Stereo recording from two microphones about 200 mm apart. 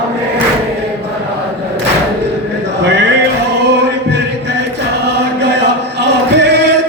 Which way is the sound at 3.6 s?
60° right (ahead or behind).